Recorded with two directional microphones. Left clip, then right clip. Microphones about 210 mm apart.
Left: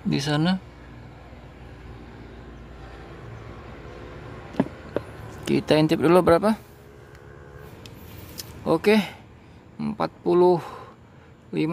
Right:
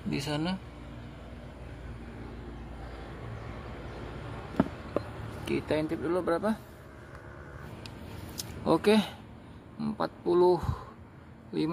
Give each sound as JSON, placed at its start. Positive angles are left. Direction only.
{"t": 0.1, "sound": "speech", "side_deg": 30}
{"t": 5.4, "sound": "speech", "side_deg": 45}
{"t": 8.4, "sound": "a sound", "side_deg": 20}
{"t": 9.8, "sound": "speech", "side_deg": 30}